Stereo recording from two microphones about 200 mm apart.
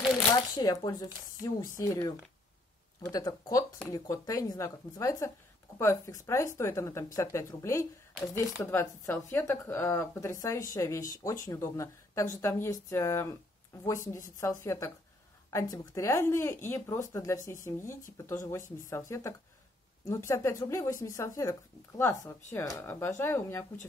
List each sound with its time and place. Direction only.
0.6 s speech: 20° left (ahead or behind)